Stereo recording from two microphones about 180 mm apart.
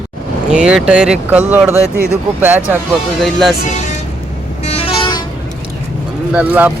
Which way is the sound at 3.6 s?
40° left (ahead or behind).